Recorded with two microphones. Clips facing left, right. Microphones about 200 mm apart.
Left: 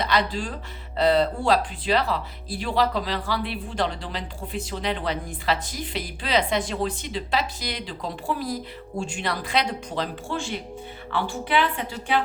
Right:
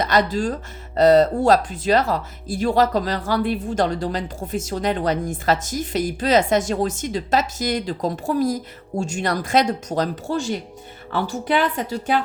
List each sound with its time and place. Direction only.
0.0 s speech: 45° right (ahead or behind)